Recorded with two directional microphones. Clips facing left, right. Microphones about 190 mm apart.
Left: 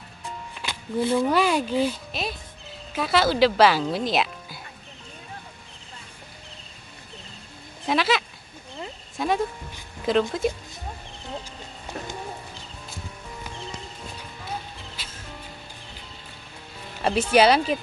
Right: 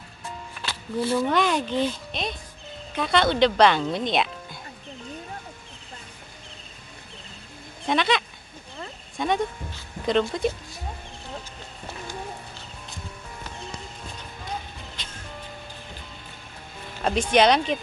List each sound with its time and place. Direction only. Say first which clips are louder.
0.6 s music: left 2 dB; 15° left (ahead or behind)
1.2 s speech: left 1 dB; 5° left (ahead or behind)
7.8 s speech: even; 5° left (ahead or behind)
15.0 s music: even; 5° left (ahead or behind)
17.0 s speech: left 1 dB; 5° left (ahead or behind)